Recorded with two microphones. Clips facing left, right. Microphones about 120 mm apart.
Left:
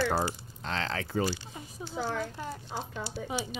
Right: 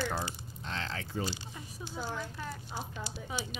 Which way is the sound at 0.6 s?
80° left.